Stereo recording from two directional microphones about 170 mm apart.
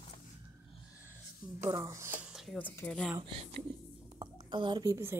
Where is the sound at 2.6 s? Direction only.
10° left (ahead or behind).